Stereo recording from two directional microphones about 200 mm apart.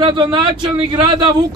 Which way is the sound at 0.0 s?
25° right (ahead or behind).